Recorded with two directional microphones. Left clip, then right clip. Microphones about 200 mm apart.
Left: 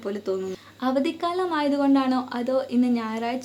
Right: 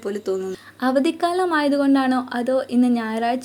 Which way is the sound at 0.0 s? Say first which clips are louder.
Right 3 dB; 10° right (ahead or behind).